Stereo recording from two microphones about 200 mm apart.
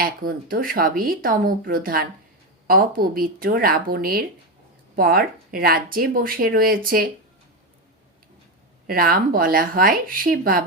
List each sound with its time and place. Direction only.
0.0 s speech: 45° right (ahead or behind)
8.9 s speech: 45° right (ahead or behind)